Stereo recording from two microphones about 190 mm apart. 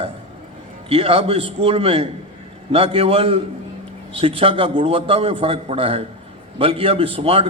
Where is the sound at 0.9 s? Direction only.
30° right (ahead or behind).